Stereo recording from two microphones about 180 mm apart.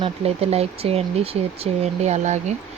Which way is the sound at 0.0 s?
35° right (ahead or behind).